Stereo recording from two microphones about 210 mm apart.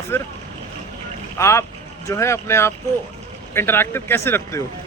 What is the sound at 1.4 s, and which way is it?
Speech, 15° left (ahead or behind).